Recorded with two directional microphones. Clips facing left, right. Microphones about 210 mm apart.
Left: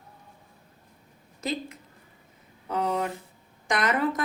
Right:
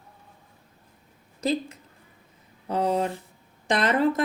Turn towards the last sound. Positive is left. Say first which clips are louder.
# right 4 dB
turn(degrees=-30)  # may be behind; listen again after turning